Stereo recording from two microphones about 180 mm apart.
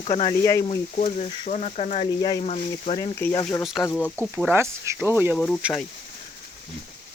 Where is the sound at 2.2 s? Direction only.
25° left (ahead or behind); by 4.2 s 10° left (ahead or behind).